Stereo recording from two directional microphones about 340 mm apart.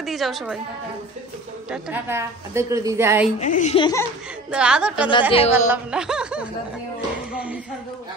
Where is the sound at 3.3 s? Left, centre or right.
Left.